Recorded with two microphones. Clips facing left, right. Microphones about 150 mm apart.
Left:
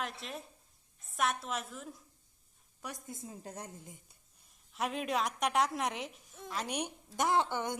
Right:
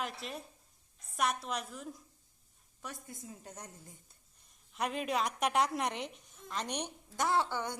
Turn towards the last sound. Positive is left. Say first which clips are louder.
# left 1 dB
turn(degrees=20)  # may be behind; listen again after turning